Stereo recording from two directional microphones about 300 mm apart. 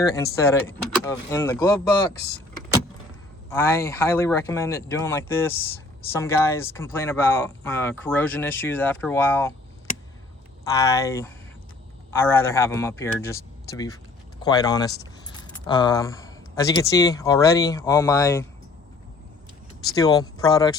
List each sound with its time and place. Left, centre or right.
0.3 s speech: centre
3.5 s speech: centre
9.9 s a sound: left
10.6 s speech: centre
20.0 s speech: centre